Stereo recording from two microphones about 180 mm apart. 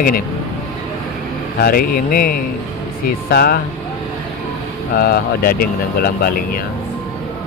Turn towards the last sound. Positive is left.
turn(degrees=55)  # may be behind; listen again after turning